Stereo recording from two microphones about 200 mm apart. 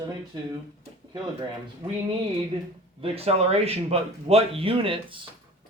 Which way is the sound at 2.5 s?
25° right (ahead or behind).